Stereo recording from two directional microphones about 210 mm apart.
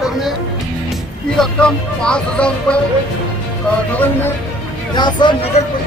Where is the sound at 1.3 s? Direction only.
5° left (ahead or behind).